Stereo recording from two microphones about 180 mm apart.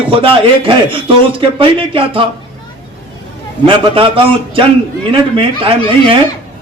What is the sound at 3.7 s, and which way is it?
A man's voice, 30° right (ahead or behind).